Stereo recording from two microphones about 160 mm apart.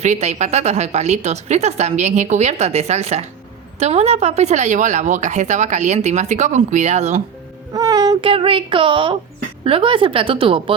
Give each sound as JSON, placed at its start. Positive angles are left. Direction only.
{"t": 0.0, "sound": "a woman's voice", "side_deg": -45}
{"t": 7.7, "sound": "a sound", "side_deg": -20}
{"t": 8.2, "sound": "a woman's voice", "side_deg": -35}